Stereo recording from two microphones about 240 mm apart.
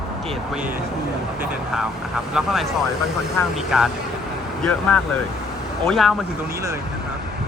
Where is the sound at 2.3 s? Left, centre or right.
Centre.